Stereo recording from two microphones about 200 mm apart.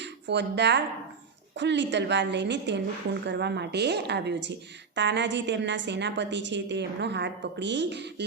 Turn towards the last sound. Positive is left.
turn(degrees=-60)  # may be behind; listen again after turning